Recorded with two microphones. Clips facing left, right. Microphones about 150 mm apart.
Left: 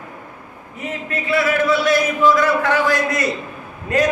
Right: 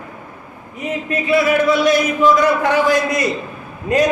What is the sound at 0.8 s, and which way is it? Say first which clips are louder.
A man's voice: right 4 dB; 15° right (ahead or behind).